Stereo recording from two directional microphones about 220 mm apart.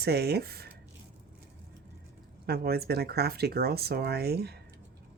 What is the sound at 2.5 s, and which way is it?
Speech, 45° right (ahead or behind).